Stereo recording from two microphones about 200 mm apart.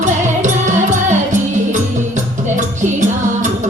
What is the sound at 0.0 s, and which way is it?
Music, 40° right (ahead or behind).